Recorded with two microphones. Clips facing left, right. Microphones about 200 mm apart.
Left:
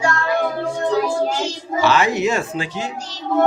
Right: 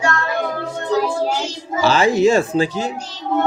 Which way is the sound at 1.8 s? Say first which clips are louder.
Right 3 dB; 30° right (ahead or behind).